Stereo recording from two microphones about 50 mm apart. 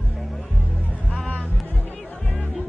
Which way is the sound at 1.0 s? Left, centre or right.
Left.